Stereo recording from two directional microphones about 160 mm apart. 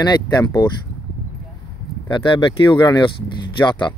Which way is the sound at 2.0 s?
30° left (ahead or behind).